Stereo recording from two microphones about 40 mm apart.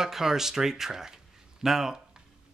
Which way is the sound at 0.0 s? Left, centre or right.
Centre.